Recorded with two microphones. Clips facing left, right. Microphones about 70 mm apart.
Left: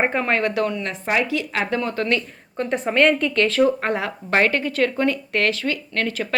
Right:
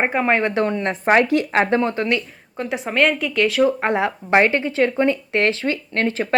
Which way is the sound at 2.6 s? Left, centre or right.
Centre.